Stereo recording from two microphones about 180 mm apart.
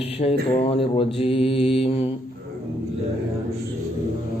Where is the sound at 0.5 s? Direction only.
30° left (ahead or behind).